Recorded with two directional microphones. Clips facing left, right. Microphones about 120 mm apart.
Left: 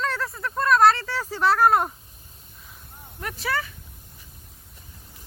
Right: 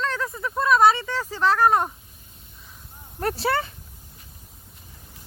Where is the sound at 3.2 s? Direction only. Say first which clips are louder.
Right 5 dB; 35° right (ahead or behind).